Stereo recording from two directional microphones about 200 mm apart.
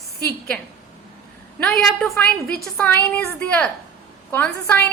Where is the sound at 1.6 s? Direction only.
Centre (ahead or behind).